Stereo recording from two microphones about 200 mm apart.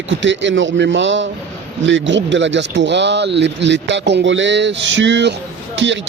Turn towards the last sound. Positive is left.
turn(degrees=-65)  # may be behind; listen again after turning